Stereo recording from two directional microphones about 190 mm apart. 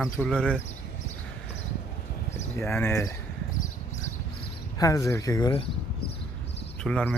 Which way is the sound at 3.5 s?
40° left (ahead or behind).